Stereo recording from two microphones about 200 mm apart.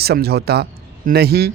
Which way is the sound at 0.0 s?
50° right (ahead or behind).